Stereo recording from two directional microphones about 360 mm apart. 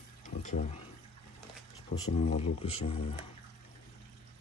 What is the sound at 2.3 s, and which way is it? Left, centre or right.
Speech, centre.